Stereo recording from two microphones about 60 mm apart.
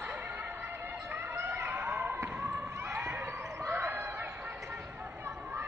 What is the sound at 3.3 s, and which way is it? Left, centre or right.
Basketball bounce, right.